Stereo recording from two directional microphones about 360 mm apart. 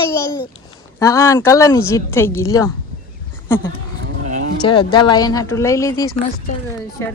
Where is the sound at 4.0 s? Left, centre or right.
Right.